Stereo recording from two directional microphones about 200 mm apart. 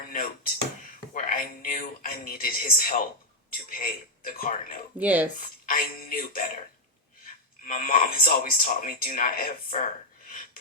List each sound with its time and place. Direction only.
0.0 s a sound: 45° left (ahead or behind)
1.1 s a man's voice: 45° left (ahead or behind)
4.9 s speech: 10° right (ahead or behind)
5.4 s speech: 45° left (ahead or behind)